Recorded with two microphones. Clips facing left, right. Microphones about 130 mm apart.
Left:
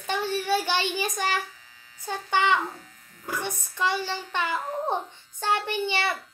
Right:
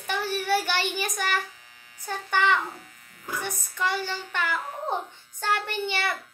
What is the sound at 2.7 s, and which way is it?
Electric shaver, 70° right (ahead or behind).